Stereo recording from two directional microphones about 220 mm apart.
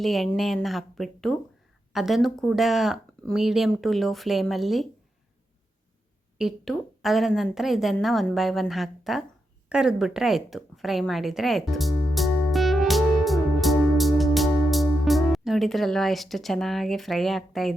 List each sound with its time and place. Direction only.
0.0 s speech: centre (ahead or behind)
6.4 s speech: centre (ahead or behind)
9.6 s a sound: 5° right (ahead or behind)